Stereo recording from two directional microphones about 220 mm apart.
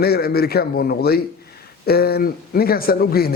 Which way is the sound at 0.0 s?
45° left (ahead or behind).